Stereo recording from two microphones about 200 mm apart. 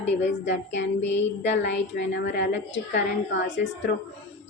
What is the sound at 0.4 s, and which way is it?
A woman's voice, 65° left (ahead or behind).